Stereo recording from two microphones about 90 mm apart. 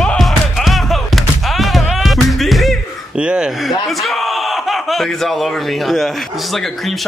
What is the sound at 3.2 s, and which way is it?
Speech, 10° right (ahead or behind).